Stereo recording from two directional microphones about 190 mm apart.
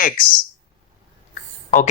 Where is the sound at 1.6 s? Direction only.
40° left (ahead or behind).